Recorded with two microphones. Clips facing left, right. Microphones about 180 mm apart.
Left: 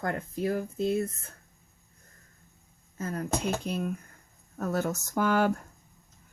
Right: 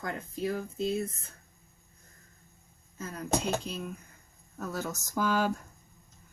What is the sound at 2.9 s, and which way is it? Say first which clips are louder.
Speech: left 1 dB; 50° left (ahead or behind).